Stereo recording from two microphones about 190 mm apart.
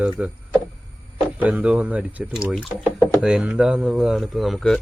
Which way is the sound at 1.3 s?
5° right (ahead or behind).